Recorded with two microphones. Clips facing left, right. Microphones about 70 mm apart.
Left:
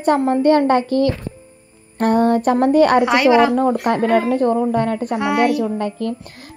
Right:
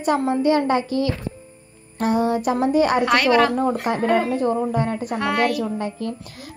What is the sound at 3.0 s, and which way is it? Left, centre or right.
Speech, centre.